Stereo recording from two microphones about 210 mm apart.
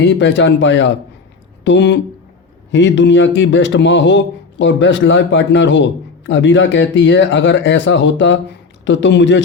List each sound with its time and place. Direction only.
0.2 s a man's voice: 60° left (ahead or behind)